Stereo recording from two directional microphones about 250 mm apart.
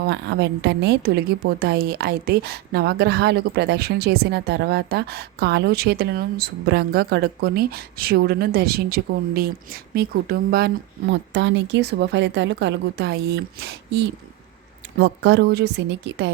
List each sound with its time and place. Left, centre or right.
0.0 s a woman's voice: right